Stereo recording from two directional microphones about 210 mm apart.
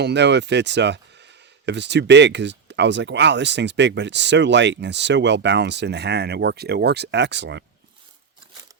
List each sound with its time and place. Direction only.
0.0 s speech: 55° right (ahead or behind)